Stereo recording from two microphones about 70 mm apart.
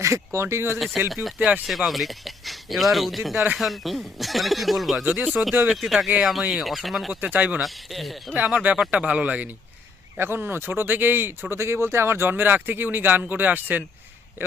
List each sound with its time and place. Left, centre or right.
0.0 s speech: right
1.1 s speech: centre
7.1 s speech: right
7.6 s speech: centre
8.4 s speech: centre
10.2 s speech: right